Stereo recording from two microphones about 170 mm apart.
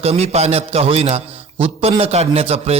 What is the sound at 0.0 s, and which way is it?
A man's voice, 40° right (ahead or behind).